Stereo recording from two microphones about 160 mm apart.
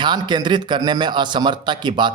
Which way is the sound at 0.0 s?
30° right (ahead or behind).